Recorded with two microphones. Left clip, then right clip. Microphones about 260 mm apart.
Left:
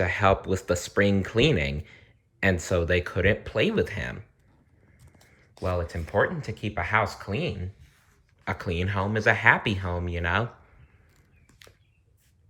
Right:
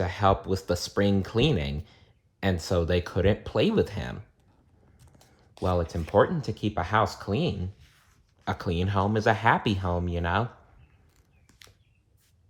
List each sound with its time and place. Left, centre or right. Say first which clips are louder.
0.0 s speech: left 2 dB; centre
5.4 s speech: right 2 dB; centre